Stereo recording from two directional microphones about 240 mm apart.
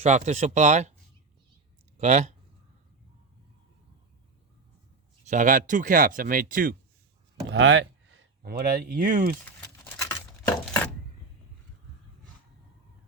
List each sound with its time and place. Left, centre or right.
0.0 s speech: right
2.0 s speech: right
5.3 s speech: right
7.4 s a sound: right
8.4 s speech: right
9.6 s a sound: centre